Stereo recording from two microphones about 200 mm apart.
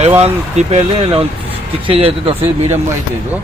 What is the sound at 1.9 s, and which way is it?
Speech, 30° right (ahead or behind).